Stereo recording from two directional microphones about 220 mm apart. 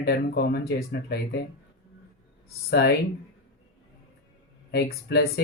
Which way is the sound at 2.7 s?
45° left (ahead or behind).